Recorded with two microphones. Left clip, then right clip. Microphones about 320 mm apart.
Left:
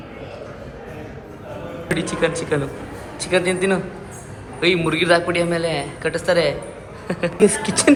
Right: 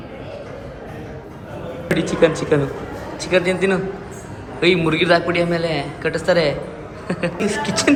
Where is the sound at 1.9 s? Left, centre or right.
Centre.